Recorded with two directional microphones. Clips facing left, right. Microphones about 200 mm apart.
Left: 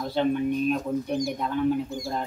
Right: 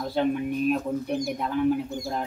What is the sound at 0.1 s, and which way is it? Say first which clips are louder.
Speech: left 2 dB; 5° right (ahead or behind).